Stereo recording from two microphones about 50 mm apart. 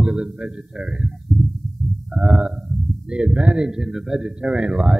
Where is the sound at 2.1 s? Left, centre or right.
Centre.